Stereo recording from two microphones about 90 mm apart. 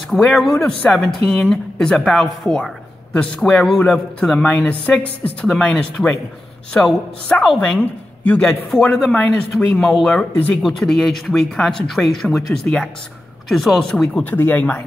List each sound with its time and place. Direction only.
0.1 s a woman's voice: 5° left (ahead or behind)
8.5 s speech: 5° left (ahead or behind)
10.3 s speech: 20° left (ahead or behind)
10.6 s speech: 5° left (ahead or behind)
14.2 s speech: 20° left (ahead or behind)